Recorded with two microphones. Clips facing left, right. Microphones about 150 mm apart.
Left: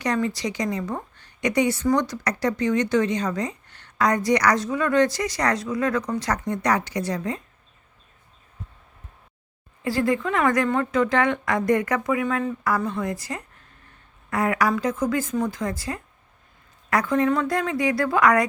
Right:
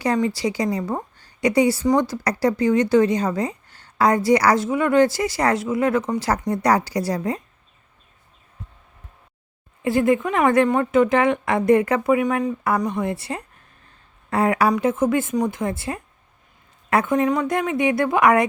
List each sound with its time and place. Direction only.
0.2 s a woman's voice: 25° right (ahead or behind)
9.8 s speech: 20° right (ahead or behind)